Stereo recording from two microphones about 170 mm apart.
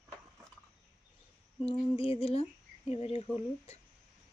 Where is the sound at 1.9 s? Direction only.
35° left (ahead or behind).